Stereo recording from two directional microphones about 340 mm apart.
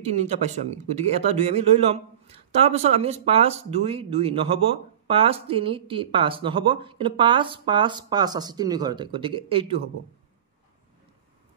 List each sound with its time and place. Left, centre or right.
0.0 s a man's voice: centre